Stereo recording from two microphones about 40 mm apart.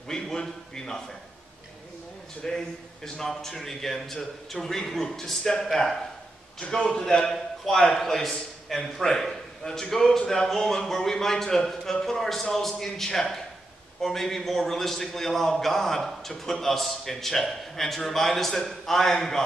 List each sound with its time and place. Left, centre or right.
0.1 s a man's voice: centre
2.4 s a man's voice: centre